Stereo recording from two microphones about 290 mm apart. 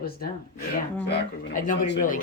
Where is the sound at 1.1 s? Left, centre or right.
Left.